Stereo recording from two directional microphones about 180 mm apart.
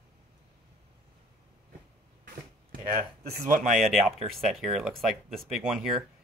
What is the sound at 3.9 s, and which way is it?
Speech, centre (ahead or behind).